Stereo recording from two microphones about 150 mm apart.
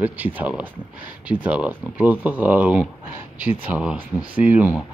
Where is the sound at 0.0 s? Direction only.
10° right (ahead or behind).